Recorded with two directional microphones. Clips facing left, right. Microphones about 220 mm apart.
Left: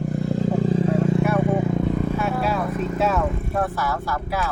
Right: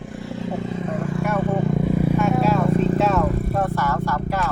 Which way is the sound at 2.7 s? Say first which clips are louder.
Right 4 dB; 30° right (ahead or behind).